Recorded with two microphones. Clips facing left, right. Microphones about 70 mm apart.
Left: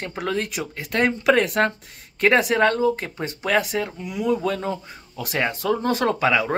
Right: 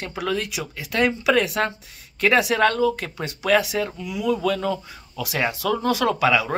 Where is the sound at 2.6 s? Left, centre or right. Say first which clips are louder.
Even; left.